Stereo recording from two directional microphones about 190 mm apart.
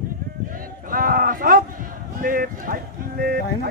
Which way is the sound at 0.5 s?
45° right (ahead or behind).